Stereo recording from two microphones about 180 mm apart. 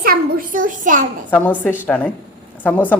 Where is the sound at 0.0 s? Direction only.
55° right (ahead or behind).